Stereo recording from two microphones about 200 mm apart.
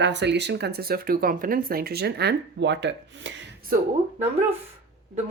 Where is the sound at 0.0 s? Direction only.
60° right (ahead or behind).